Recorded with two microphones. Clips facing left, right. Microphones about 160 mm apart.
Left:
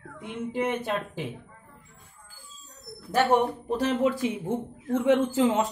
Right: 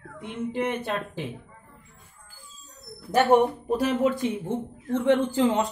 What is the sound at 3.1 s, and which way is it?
Speech, 10° right (ahead or behind).